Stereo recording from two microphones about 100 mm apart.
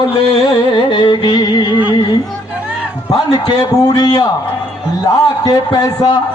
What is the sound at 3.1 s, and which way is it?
Music, 45° left (ahead or behind).